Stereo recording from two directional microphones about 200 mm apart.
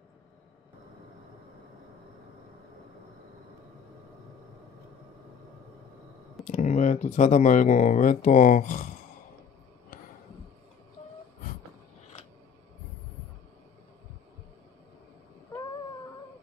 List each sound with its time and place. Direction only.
6.4 s speech: 35° left (ahead or behind)